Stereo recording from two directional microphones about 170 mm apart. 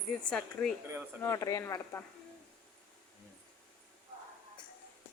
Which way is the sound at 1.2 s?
20° left (ahead or behind).